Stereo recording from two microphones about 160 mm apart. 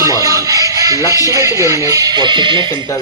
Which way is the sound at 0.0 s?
20° right (ahead or behind).